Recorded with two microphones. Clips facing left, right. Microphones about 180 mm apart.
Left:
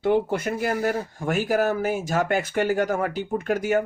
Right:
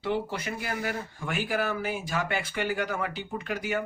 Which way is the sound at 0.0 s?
50° left (ahead or behind).